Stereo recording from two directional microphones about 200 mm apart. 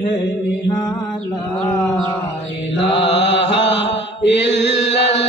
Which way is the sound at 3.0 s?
60° left (ahead or behind).